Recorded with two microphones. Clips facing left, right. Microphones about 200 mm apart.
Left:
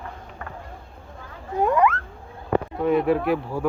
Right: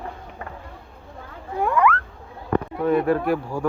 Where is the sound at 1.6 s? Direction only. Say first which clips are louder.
Left 1 dB; 20° left (ahead or behind).